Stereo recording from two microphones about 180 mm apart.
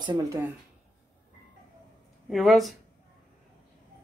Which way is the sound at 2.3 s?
Centre (ahead or behind).